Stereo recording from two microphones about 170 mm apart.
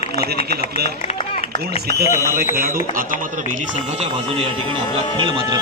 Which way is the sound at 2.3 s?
60° right (ahead or behind).